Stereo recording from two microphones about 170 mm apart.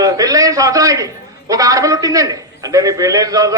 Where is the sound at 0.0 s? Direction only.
20° right (ahead or behind).